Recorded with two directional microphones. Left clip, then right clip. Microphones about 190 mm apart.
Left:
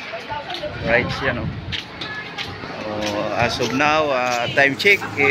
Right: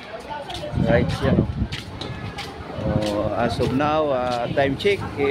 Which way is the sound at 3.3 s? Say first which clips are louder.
Left 3 dB; 30° right (ahead or behind).